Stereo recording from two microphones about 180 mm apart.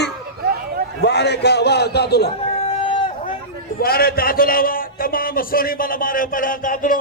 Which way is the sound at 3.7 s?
55° left (ahead or behind).